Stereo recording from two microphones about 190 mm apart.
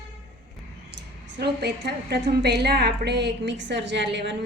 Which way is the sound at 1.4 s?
60° right (ahead or behind).